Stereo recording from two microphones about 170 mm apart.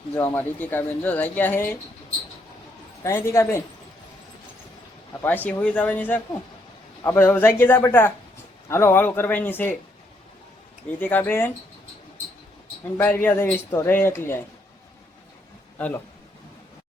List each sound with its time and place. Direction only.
0.2 s speech: 10° left (ahead or behind)
3.0 s speech: 15° left (ahead or behind)
5.2 s speech: 10° left (ahead or behind)
11.0 s speech: 10° left (ahead or behind)
13.0 s speech: 10° left (ahead or behind)